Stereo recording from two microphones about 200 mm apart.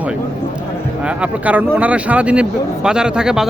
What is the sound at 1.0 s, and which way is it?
Speech, 5° right (ahead or behind).